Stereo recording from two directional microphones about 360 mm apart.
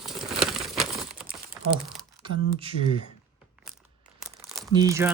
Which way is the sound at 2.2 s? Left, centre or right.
Centre.